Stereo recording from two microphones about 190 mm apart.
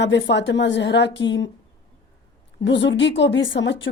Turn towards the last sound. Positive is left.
turn(degrees=75)  # may be behind; listen again after turning